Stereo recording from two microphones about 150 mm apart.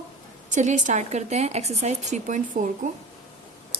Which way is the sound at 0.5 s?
55° right (ahead or behind).